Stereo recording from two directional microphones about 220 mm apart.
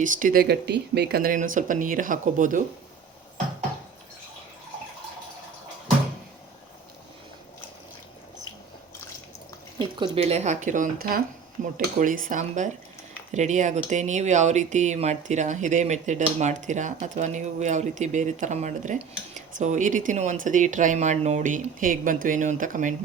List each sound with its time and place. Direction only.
0.0 s speech: 35° right (ahead or behind)
9.7 s speech: 20° right (ahead or behind)